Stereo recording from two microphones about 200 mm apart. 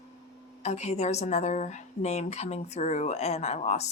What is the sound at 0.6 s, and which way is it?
Speech, 35° left (ahead or behind).